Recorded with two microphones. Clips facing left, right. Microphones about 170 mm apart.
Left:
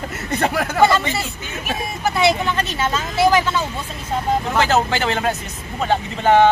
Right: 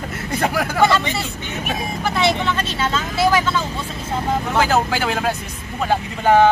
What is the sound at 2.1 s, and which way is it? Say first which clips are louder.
Speech: left 2 dB; 10° left (ahead or behind).